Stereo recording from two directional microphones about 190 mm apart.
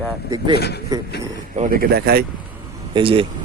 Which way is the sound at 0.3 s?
25° right (ahead or behind).